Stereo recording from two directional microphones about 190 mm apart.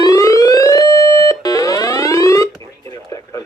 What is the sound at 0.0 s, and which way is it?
Siren, 15° left (ahead or behind).